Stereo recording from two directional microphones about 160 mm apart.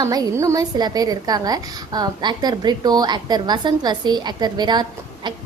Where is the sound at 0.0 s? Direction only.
25° right (ahead or behind).